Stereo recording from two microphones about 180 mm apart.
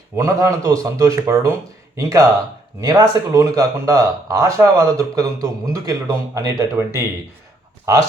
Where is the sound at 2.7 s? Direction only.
20° right (ahead or behind).